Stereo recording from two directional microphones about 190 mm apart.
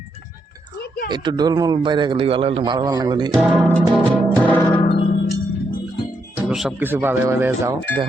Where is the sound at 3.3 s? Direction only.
10° right (ahead or behind).